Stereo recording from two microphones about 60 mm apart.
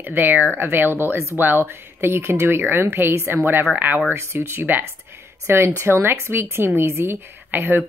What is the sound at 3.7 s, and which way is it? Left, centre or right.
Speech, right.